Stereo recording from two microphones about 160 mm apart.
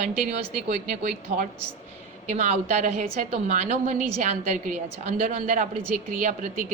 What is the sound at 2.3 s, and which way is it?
A woman's voice, 40° right (ahead or behind).